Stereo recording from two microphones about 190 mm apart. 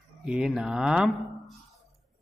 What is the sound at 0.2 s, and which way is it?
Speech, 5° right (ahead or behind).